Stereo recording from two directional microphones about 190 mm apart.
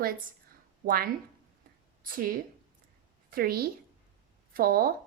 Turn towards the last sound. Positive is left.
turn(degrees=-50)  # may be behind; listen again after turning